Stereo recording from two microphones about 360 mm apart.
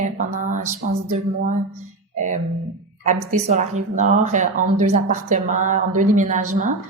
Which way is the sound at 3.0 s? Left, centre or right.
Centre.